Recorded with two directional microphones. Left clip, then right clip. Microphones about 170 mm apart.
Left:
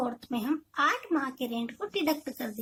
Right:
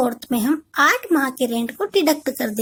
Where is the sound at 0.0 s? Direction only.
40° right (ahead or behind).